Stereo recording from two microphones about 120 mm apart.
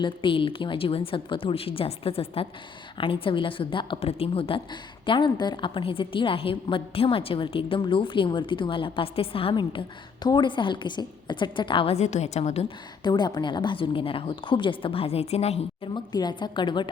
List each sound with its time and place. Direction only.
0.0 s a woman's voice: 45° left (ahead or behind)
11.9 s a woman's voice: 70° left (ahead or behind)
13.0 s a woman's voice: 35° left (ahead or behind); by 15.9 s 60° left (ahead or behind)
16.1 s a woman's voice: 40° left (ahead or behind)